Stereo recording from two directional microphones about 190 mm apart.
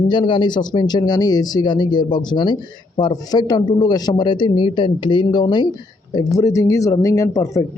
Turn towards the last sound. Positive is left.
turn(degrees=15)  # may be behind; listen again after turning